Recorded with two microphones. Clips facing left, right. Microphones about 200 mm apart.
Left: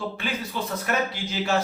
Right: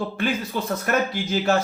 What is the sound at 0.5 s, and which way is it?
Speech, 50° right (ahead or behind).